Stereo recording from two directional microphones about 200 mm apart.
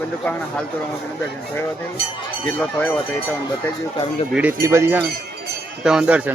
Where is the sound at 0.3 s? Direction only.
5° left (ahead or behind).